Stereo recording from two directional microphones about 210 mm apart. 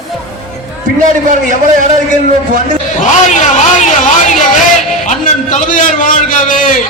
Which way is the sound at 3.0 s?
35° left (ahead or behind).